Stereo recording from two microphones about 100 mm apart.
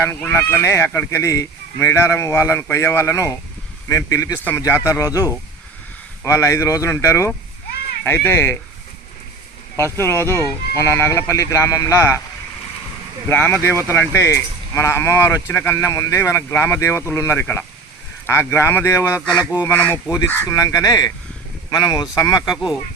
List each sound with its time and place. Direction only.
0.3 s speech: 25° left (ahead or behind)
9.7 s speech: 25° left (ahead or behind)
13.2 s speech: 20° left (ahead or behind)
19.4 s speech: 15° right (ahead or behind)
19.6 s speech: 25° left (ahead or behind)